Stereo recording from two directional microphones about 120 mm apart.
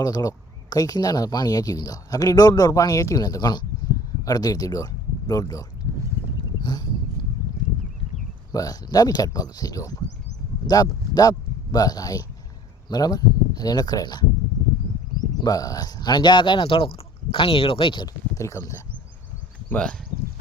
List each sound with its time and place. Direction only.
0.0 s speech: 30° left (ahead or behind)
6.6 s a sound: 35° left (ahead or behind)
8.5 s speech: 30° left (ahead or behind)
15.4 s speech: 30° left (ahead or behind)
18.3 s speech: 25° left (ahead or behind)
19.6 s speech: 10° left (ahead or behind)